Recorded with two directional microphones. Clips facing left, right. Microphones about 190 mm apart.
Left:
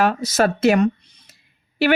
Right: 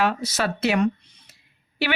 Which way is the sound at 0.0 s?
45° left (ahead or behind).